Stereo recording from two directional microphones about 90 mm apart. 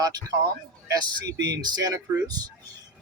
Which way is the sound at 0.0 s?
45° right (ahead or behind).